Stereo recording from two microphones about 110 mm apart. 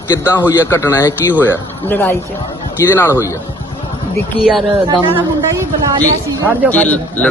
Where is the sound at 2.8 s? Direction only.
30° left (ahead or behind).